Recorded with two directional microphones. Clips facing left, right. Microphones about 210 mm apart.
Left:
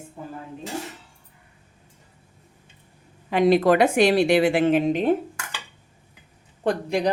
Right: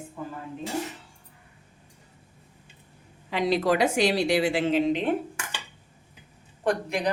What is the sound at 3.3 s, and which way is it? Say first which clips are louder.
A woman's voice: left 6 dB; 50° left (ahead or behind).